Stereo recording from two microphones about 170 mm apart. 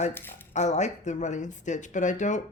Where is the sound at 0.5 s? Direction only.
45° left (ahead or behind).